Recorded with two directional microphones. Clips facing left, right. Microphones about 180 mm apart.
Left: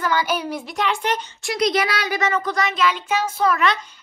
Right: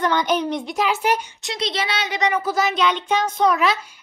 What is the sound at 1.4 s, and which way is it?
Speech, 25° right (ahead or behind).